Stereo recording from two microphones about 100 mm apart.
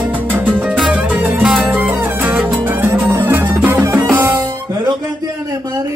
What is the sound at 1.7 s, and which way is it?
Music, 15° right (ahead or behind).